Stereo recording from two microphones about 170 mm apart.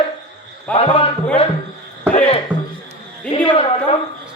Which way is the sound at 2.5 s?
25° right (ahead or behind).